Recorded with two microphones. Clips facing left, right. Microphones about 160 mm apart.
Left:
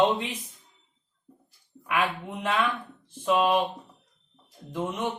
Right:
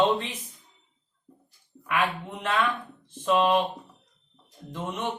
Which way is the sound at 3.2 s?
10° left (ahead or behind).